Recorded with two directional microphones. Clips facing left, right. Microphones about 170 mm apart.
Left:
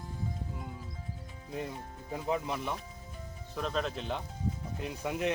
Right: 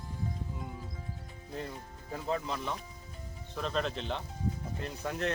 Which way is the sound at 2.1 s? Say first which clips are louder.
Left 1 dB; 15° left (ahead or behind).